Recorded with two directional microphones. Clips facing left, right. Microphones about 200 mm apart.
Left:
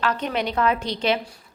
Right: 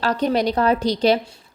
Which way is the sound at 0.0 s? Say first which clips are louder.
Right 5 dB; 35° right (ahead or behind).